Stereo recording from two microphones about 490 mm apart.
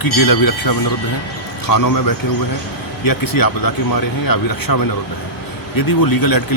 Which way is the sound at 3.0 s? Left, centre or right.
Left.